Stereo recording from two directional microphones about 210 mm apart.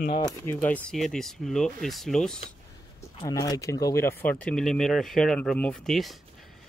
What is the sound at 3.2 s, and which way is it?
Speech, 20° left (ahead or behind).